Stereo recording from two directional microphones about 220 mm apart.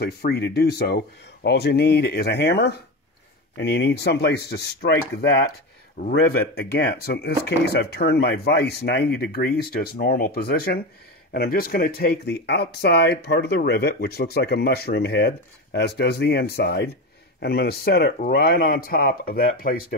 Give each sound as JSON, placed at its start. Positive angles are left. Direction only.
{"t": 0.0, "sound": "speech", "side_deg": 50}